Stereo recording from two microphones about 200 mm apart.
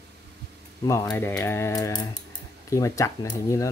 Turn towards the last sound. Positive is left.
turn(degrees=15)  # may be behind; listen again after turning